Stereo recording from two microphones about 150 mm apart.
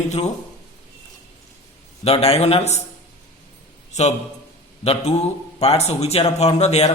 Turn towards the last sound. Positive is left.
turn(degrees=45)  # may be behind; listen again after turning